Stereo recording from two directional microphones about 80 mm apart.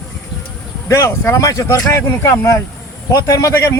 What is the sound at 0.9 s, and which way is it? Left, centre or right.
Speech, left.